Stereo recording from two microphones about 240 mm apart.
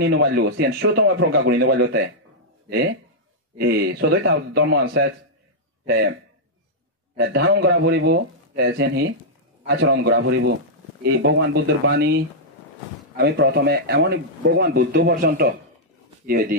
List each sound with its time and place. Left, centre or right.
0.0 s speech: right
3.5 s speech: right
7.2 s speech: right
13.2 s speech: right